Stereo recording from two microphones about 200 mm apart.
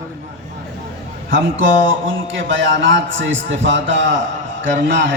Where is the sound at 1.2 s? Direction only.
70° right (ahead or behind).